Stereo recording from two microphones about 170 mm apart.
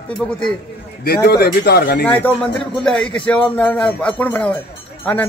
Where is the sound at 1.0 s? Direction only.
65° left (ahead or behind).